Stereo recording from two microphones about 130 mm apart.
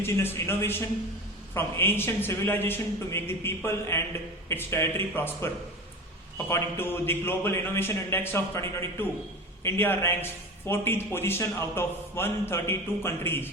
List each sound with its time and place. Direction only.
0.0 s a man's voice: 20° left (ahead or behind)